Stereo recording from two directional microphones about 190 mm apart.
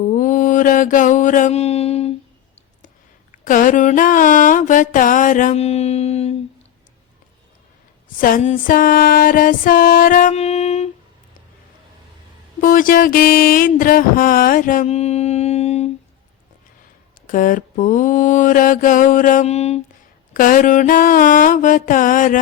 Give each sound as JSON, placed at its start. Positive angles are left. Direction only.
{"t": 0.0, "sound": "mantra", "side_deg": 40}
{"t": 3.3, "sound": "mantra", "side_deg": 45}
{"t": 8.2, "sound": "mantra", "side_deg": 45}
{"t": 12.5, "sound": "mantra", "side_deg": 45}
{"t": 17.2, "sound": "mantra", "side_deg": 45}
{"t": 20.3, "sound": "mantra", "side_deg": 45}